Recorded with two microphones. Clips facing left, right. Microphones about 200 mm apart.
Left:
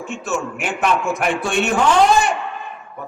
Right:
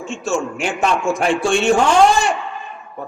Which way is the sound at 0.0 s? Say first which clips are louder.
Right 3 dB; 25° right (ahead or behind).